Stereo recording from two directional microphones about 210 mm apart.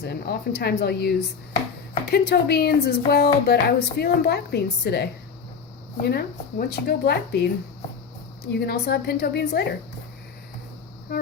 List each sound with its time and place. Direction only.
0.0 s a woman's voice: 50° left (ahead or behind)
8.5 s a woman's voice: 50° left (ahead or behind)